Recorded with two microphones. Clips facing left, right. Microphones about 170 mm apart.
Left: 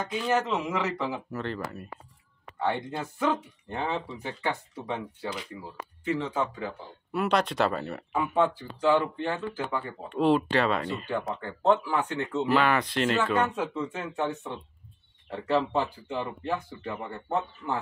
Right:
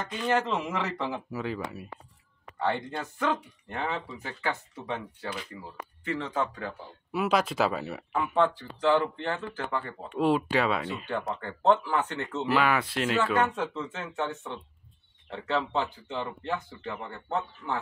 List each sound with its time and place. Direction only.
0.1 s speech: 5° left (ahead or behind)
1.3 s speech: 5° right (ahead or behind)
2.6 s speech: 10° left (ahead or behind)
3.3 s speech: 20° left (ahead or behind)
7.1 s speech: 5° right (ahead or behind)
8.4 s speech: 10° left (ahead or behind)
10.0 s speech: 10° right (ahead or behind); by 12.4 s 10° left (ahead or behind)
12.4 s speech: 5° right (ahead or behind)
13.6 s speech: 10° left (ahead or behind)